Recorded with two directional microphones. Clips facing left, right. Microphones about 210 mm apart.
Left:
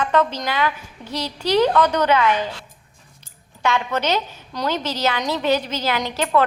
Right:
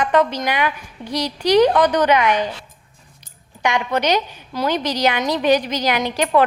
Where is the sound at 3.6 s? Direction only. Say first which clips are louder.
Right 2 dB; 15° right (ahead or behind).